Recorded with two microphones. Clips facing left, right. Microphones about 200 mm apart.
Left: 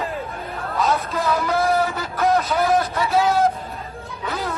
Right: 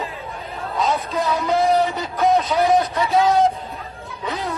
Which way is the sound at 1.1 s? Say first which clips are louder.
Right 4 dB; 20° right (ahead or behind).